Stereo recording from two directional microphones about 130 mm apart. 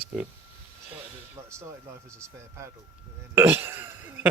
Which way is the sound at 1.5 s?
20° right (ahead or behind).